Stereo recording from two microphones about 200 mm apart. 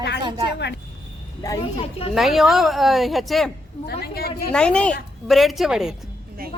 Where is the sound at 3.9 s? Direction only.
50° left (ahead or behind).